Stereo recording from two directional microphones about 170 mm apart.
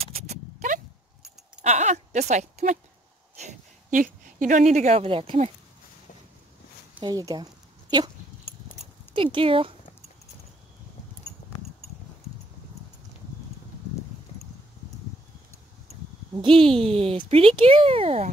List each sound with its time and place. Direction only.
0.0 s a sound: 40° right (ahead or behind)
1.6 s a woman's voice: 40° right (ahead or behind)
7.0 s speech: 25° right (ahead or behind)
9.1 s speech: 30° right (ahead or behind)
16.3 s speech: 30° right (ahead or behind)